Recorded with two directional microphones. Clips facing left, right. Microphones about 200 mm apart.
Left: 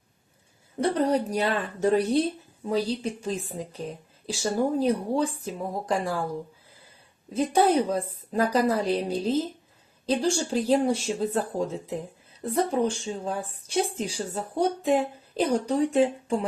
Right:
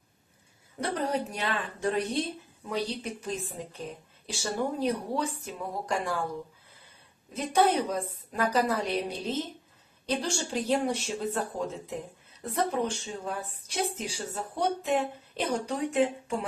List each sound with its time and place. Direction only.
0.8 s a woman's voice: 35° left (ahead or behind)
2.0 s a woman's voice: centre (ahead or behind)
2.8 s a woman's voice: 30° left (ahead or behind)
7.3 s a woman's voice: 30° left (ahead or behind)